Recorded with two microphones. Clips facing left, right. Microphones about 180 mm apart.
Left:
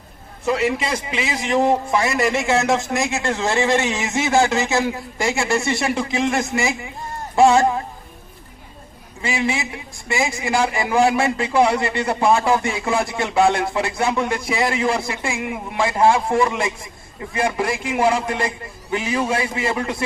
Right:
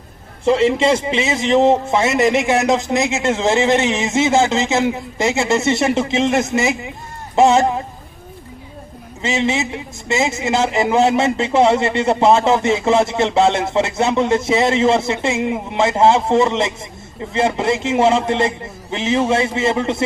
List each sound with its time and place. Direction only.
0.4 s a man's voice: 25° right (ahead or behind)
9.2 s a man's voice: 25° right (ahead or behind)